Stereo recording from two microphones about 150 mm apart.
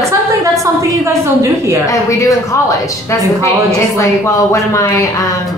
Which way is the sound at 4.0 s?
20° left (ahead or behind).